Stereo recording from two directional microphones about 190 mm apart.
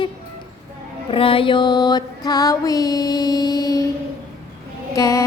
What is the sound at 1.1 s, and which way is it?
Music, 30° left (ahead or behind).